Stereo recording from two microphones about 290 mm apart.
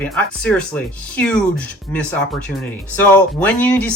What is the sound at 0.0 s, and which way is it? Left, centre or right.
Speech, centre.